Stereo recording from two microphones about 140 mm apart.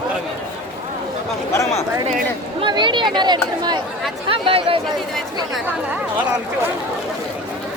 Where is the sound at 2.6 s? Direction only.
35° right (ahead or behind).